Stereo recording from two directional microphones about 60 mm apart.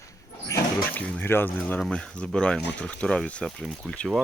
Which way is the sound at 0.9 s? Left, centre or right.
Left.